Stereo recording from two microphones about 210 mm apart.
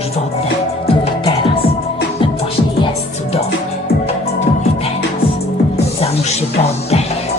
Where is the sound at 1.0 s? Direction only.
25° left (ahead or behind).